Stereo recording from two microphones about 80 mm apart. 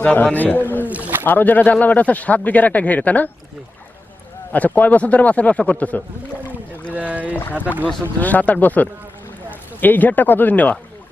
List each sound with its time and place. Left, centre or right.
0.0 s speech: centre
0.9 s rowboat: centre
1.2 s speech: left
4.5 s speech: centre
6.9 s boat: centre
8.2 s speech: left